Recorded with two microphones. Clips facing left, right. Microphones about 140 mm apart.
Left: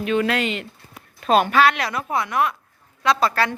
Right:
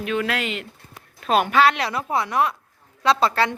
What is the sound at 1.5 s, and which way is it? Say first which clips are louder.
A woman's voice: even; 30° right (ahead or behind).